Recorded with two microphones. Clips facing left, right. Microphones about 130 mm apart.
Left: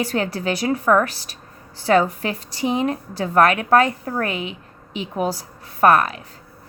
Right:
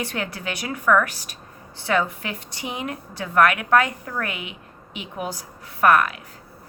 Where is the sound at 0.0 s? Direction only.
35° left (ahead or behind).